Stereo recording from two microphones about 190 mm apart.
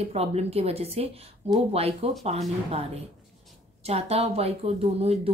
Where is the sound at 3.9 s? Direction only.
35° right (ahead or behind).